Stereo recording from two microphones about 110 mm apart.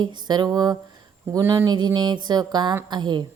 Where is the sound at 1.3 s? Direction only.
25° right (ahead or behind).